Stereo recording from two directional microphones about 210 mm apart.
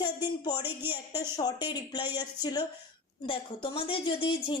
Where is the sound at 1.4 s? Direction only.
20° left (ahead or behind).